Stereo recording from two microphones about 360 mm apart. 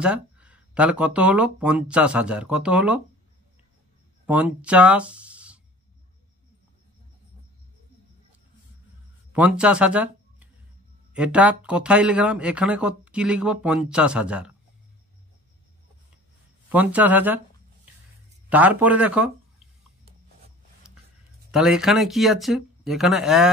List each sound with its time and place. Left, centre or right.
0.0 s speech: centre
4.3 s speech: centre
9.3 s speech: centre
16.6 s speech: centre
18.5 s speech: centre
21.5 s speech: centre